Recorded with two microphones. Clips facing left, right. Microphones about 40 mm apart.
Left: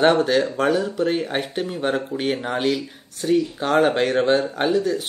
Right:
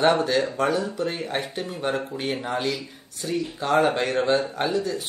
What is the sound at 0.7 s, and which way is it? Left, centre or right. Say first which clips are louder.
Speech: left 5 dB; left.